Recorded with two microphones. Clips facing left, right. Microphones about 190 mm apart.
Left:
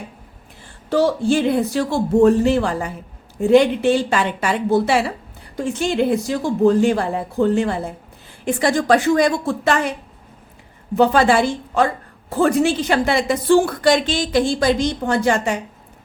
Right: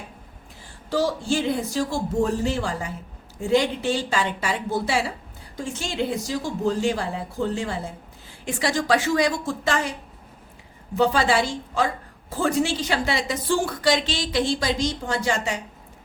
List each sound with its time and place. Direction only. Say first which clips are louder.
0.9 s a woman's voice: left 6 dB; 60° left (ahead or behind)
10.9 s a woman's voice: left 6 dB; 55° left (ahead or behind)